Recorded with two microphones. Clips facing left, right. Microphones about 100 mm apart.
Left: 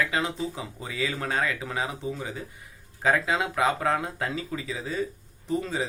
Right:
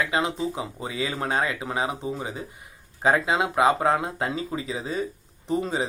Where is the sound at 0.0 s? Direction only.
20° right (ahead or behind).